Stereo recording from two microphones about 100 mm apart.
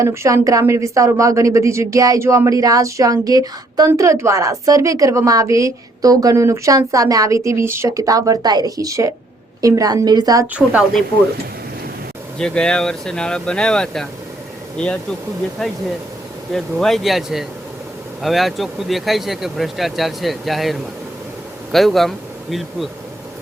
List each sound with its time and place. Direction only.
0.0 s speech: 30° right (ahead or behind)
10.4 s speech: 15° right (ahead or behind)
12.4 s speech: 5° left (ahead or behind)
15.6 s speech: 5° left (ahead or behind)